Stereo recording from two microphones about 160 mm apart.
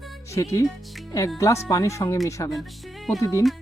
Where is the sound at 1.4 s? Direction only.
20° left (ahead or behind).